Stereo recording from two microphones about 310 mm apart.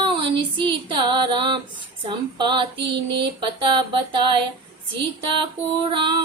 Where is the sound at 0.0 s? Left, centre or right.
Centre.